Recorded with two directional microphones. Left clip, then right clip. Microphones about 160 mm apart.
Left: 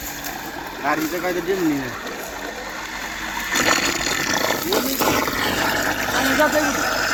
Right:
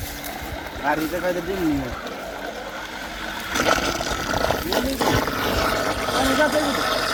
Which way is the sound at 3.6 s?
35° right (ahead or behind).